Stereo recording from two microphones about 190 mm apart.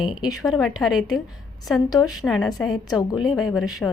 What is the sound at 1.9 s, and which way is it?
Speech, 20° left (ahead or behind).